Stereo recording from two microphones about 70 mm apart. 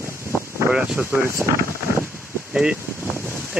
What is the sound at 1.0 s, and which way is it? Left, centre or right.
Speech, right.